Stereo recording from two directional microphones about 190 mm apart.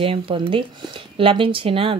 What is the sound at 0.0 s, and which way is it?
Speech, 30° right (ahead or behind).